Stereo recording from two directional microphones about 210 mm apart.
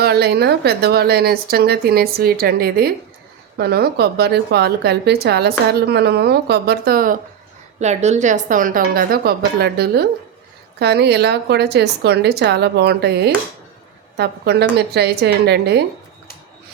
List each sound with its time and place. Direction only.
0.0 s speech: 50° right (ahead or behind)